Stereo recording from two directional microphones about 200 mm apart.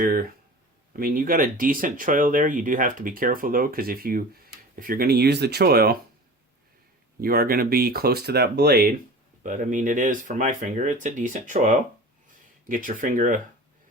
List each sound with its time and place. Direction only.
0.0 s speech: 45° right (ahead or behind)
7.2 s speech: 45° right (ahead or behind)
9.4 s speech: 40° right (ahead or behind)